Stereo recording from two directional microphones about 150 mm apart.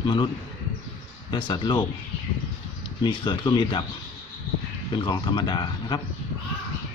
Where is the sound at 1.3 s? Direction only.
30° left (ahead or behind).